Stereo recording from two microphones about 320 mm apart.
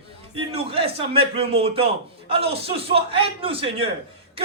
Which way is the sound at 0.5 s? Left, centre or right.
Centre.